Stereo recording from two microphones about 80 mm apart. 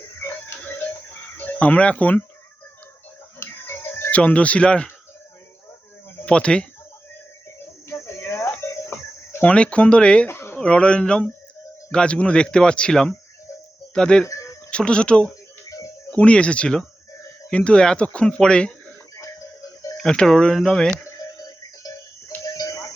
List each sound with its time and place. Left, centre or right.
0.2 s a sound: left
1.5 s speech: centre
3.4 s music: left
4.1 s speech: centre
6.2 s speech: centre
7.9 s a sound: left
9.4 s speech: centre
10.2 s a sound: left
10.6 s speech: centre
14.3 s music: left
14.7 s speech: centre
20.0 s speech: centre
22.4 s a sound: left